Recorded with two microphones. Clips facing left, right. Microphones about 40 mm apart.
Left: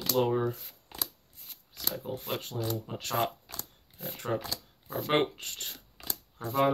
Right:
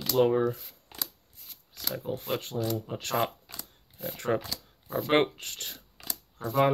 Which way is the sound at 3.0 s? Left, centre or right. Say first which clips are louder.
Right 1 dB; right.